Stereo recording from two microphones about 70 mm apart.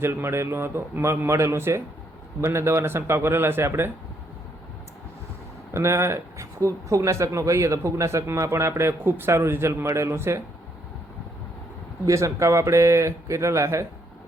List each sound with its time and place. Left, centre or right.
0.0 s a man's voice: right
5.7 s speech: right
12.0 s speech: right